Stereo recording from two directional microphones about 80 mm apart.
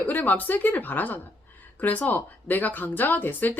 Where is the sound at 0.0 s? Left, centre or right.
Left.